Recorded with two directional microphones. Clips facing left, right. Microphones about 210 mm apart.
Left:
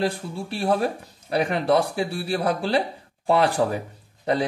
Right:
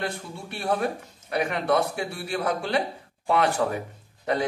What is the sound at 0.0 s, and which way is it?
A man's voice, 30° left (ahead or behind).